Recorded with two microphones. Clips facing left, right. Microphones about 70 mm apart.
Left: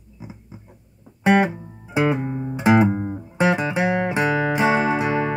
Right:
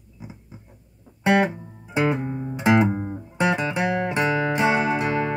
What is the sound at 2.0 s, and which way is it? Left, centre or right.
Music, centre.